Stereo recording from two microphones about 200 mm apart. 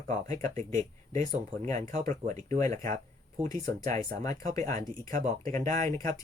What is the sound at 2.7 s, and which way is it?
Speech, 40° right (ahead or behind).